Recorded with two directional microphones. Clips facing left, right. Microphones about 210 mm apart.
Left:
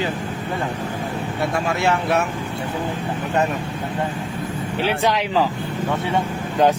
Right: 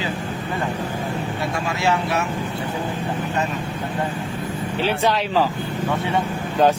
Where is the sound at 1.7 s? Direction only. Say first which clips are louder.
Left 1 dB; 55° left (ahead or behind).